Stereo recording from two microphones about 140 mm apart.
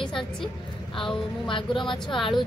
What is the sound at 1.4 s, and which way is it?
Speech, 35° left (ahead or behind).